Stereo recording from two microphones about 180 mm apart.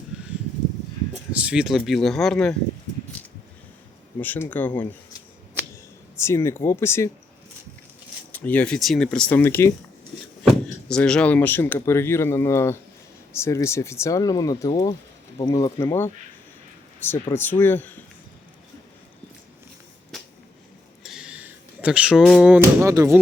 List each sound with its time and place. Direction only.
1.3 s speech: 5° right (ahead or behind)
4.2 s speech: 10° left (ahead or behind)
6.1 s speech: 15° left (ahead or behind)
8.3 s speech: 10° left (ahead or behind)
21.0 s a sound: 5° right (ahead or behind)